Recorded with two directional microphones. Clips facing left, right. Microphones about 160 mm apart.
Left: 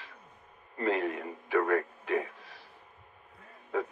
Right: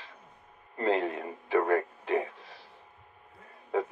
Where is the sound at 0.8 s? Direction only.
30° right (ahead or behind).